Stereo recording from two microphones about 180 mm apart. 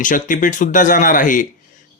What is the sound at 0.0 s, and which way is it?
Speech, 45° left (ahead or behind).